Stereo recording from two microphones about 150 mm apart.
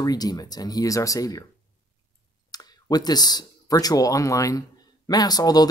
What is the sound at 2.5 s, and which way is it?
Speech, 25° left (ahead or behind).